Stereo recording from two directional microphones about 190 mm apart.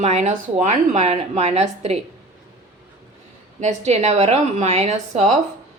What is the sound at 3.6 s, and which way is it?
A woman's voice, 35° right (ahead or behind).